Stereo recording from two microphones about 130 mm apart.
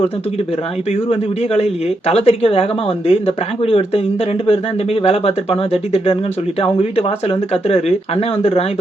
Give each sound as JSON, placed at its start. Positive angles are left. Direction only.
{"t": 1.1, "sound": "speech", "side_deg": 55}